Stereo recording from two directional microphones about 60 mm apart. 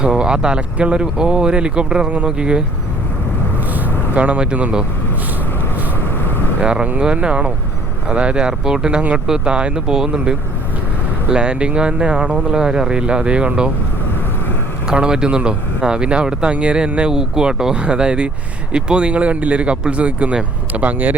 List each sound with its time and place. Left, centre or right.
0.0 s speech: centre
4.1 s speech: right
6.6 s speech: centre
14.8 s speech: centre